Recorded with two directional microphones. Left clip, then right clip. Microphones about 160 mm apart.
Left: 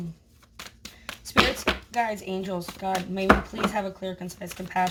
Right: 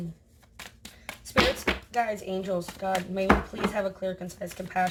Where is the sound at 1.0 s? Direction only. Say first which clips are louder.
Left 2 dB; 20° left (ahead or behind).